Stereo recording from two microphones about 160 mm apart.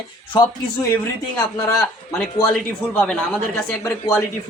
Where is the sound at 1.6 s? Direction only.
15° left (ahead or behind).